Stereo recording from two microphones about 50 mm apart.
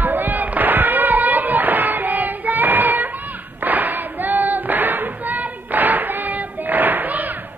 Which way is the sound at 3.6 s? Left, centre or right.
Right.